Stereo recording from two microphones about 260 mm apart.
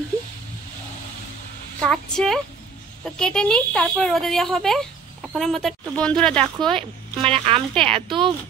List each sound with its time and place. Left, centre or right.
1.8 s speech: centre
7.2 s speech: right